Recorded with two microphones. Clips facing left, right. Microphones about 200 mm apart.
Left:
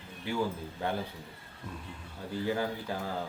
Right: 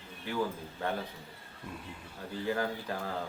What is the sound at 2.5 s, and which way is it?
Speech, 10° left (ahead or behind).